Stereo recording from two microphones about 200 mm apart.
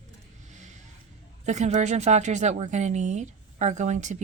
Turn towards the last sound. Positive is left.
turn(degrees=-35)  # may be behind; listen again after turning